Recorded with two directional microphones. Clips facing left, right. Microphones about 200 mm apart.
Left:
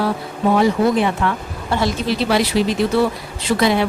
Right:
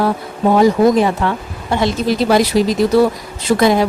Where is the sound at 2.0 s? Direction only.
45° right (ahead or behind).